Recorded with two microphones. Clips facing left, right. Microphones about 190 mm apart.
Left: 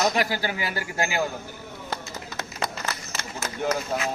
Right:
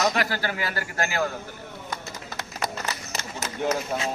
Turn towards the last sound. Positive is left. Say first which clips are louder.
# left 1 dB
turn(degrees=0)  # may be behind; listen again after turning